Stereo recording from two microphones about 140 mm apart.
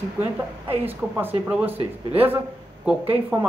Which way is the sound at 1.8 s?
45° right (ahead or behind).